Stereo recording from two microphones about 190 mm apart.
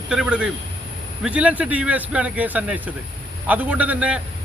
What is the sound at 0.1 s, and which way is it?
A man's voice, 5° right (ahead or behind).